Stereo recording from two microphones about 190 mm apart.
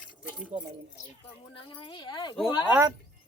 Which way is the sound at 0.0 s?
5° right (ahead or behind).